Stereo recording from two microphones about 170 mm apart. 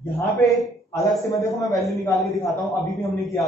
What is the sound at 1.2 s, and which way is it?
A man's voice, 20° left (ahead or behind).